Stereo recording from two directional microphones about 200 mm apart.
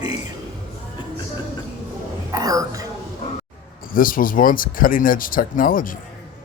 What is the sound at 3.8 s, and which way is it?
Speech, 45° left (ahead or behind).